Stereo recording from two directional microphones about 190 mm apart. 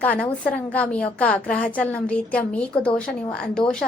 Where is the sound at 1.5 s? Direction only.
50° left (ahead or behind).